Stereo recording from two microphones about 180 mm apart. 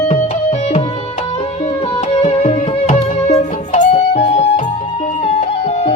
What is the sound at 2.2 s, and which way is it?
Music, 35° left (ahead or behind).